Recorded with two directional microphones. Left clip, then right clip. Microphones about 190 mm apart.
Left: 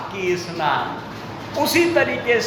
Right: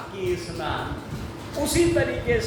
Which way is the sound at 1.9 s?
10° right (ahead or behind).